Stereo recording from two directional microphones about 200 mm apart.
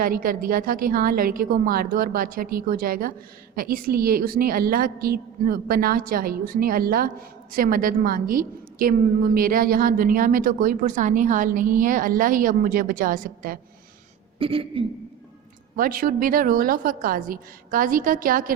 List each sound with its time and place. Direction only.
0.0 s a woman's voice: 45° right (ahead or behind)
14.3 s speech: 25° right (ahead or behind)
15.7 s a woman's voice: 45° right (ahead or behind)